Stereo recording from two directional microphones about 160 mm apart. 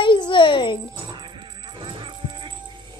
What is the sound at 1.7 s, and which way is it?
Music, 30° right (ahead or behind).